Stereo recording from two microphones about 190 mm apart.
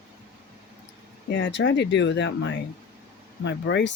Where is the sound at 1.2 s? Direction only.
65° left (ahead or behind).